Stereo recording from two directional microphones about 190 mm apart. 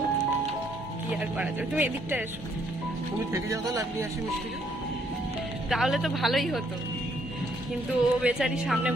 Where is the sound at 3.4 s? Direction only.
15° right (ahead or behind).